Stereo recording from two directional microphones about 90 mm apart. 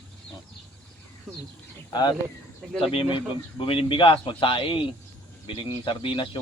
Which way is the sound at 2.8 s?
90° left.